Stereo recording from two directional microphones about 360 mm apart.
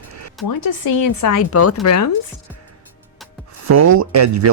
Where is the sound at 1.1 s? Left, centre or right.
Left.